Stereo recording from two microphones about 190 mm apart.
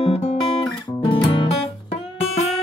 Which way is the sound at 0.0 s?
30° left (ahead or behind).